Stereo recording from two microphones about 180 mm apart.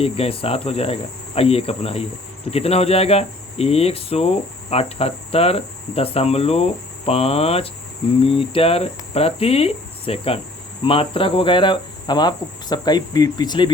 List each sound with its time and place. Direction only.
0.0 s cricket: 35° left (ahead or behind)